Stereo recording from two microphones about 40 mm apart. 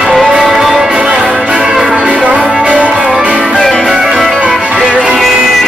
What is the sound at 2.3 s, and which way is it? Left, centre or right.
Music, right.